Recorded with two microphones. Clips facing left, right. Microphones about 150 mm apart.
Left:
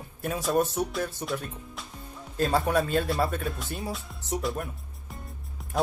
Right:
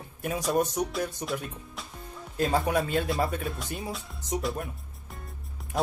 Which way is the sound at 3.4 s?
Centre (ahead or behind).